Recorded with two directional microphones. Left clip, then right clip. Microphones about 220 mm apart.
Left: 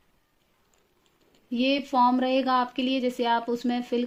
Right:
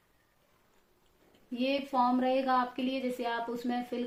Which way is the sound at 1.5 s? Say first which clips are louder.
Left 6 dB; 40° left (ahead or behind).